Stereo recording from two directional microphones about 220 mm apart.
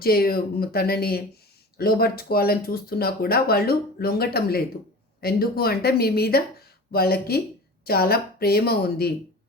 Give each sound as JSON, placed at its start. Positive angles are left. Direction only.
{"t": 0.0, "sound": "speech", "side_deg": 45}